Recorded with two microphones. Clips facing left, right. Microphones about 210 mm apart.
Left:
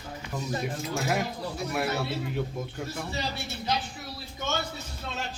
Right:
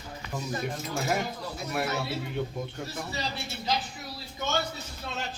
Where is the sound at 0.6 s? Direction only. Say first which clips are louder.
Left 1 dB; centre (ahead or behind).